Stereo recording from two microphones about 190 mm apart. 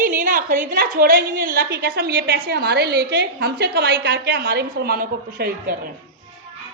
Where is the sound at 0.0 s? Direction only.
45° right (ahead or behind).